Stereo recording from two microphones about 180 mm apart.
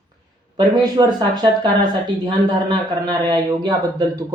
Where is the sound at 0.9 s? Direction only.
20° right (ahead or behind).